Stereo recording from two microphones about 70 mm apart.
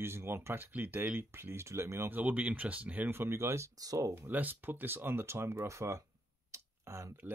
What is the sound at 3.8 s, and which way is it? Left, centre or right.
Speech, right.